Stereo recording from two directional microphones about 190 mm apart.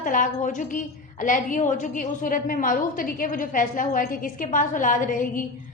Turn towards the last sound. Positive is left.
turn(degrees=45)  # may be behind; listen again after turning